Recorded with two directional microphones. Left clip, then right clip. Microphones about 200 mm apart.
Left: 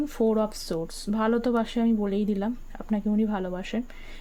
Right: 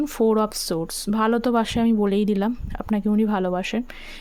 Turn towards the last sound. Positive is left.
turn(degrees=-35)  # may be behind; listen again after turning